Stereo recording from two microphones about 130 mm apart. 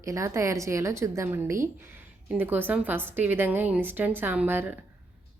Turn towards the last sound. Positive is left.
turn(degrees=-15)  # may be behind; listen again after turning